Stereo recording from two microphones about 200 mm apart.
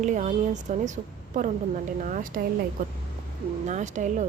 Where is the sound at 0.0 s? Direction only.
40° right (ahead or behind).